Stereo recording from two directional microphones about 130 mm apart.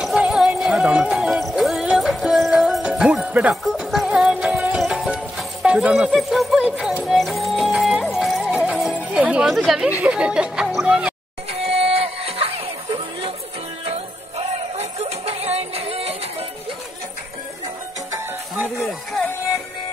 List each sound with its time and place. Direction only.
0.0 s music: 5° right (ahead or behind)
9.6 s speech: centre (ahead or behind)
11.5 s music: 45° right (ahead or behind)
13.8 s music: 55° right (ahead or behind)
18.8 s music: centre (ahead or behind)